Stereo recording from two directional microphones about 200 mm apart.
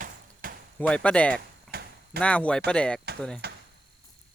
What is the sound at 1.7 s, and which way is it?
Clip-clop, 50° right (ahead or behind).